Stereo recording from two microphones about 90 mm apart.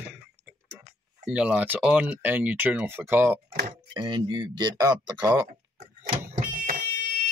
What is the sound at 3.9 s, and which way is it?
Speech, 60° right (ahead or behind).